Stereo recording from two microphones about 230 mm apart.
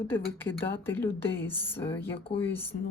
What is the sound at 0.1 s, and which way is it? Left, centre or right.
Speech, centre.